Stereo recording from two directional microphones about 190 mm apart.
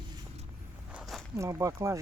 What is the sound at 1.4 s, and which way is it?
Speech, 15° right (ahead or behind).